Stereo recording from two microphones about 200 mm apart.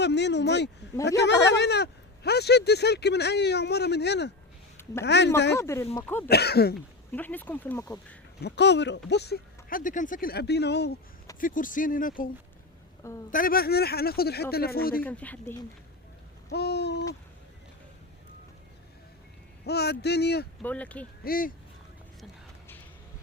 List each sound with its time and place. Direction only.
0.0 s speech: 60° left (ahead or behind)
5.5 s speech: 15° left (ahead or behind)
6.2 s speech: 55° left (ahead or behind)
7.1 s speech: 10° left (ahead or behind)
8.4 s speech: 55° left (ahead or behind)
11.3 s speech: 40° left (ahead or behind)
13.3 s speech: 45° left (ahead or behind)
15.0 s speech: 5° left (ahead or behind)
16.5 s speech: 55° left (ahead or behind)
19.6 s speech: 55° left (ahead or behind)
20.6 s speech: 5° left (ahead or behind)
21.2 s speech: 45° left (ahead or behind)